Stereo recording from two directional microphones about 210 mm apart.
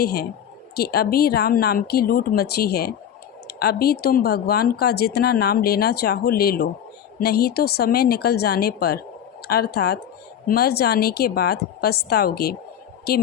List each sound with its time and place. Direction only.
0.0 s speech: 45° left (ahead or behind)